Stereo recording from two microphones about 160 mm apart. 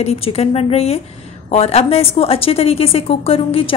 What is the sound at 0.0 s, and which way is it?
A woman's voice, 40° left (ahead or behind).